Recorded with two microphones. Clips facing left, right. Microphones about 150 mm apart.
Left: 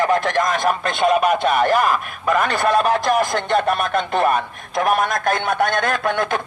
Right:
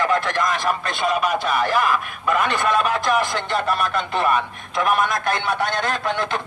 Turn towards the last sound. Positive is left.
turn(degrees=55)  # may be behind; listen again after turning